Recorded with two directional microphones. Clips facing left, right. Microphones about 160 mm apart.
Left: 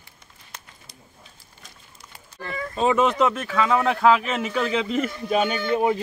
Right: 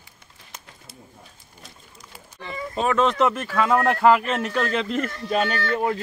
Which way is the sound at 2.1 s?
Centre (ahead or behind).